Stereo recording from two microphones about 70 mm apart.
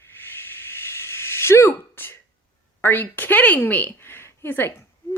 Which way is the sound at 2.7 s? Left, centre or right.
Left.